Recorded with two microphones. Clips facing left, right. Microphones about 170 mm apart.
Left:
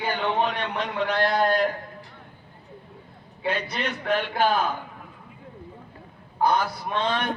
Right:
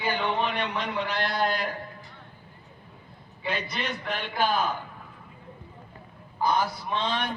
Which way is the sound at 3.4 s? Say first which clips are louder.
Left 4 dB; 55° left (ahead or behind).